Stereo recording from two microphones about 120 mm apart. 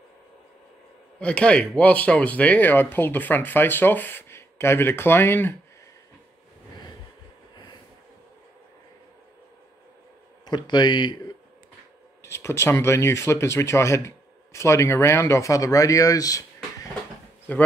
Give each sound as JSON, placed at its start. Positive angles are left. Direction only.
{"t": 1.2, "sound": "speech", "side_deg": 10}
{"t": 10.4, "sound": "speech", "side_deg": 40}
{"t": 12.2, "sound": "speech", "side_deg": 20}
{"t": 17.5, "sound": "speech", "side_deg": 15}